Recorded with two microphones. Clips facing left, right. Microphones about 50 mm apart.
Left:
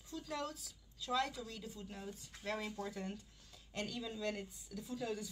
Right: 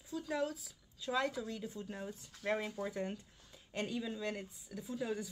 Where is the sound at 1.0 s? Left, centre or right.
Right.